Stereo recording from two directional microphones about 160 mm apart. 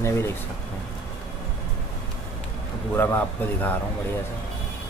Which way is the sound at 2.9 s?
10° left (ahead or behind).